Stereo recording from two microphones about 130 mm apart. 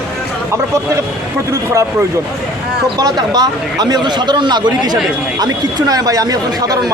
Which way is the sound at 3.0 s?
30° right (ahead or behind).